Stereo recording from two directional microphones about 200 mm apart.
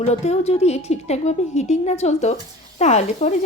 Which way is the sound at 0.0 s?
30° left (ahead or behind).